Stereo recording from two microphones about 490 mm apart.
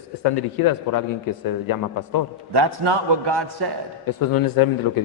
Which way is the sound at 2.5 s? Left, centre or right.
Right.